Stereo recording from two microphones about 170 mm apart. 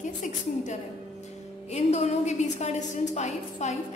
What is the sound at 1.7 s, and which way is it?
A woman's voice, 40° left (ahead or behind).